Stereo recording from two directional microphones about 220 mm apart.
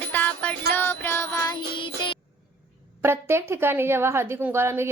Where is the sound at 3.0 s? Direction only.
10° right (ahead or behind).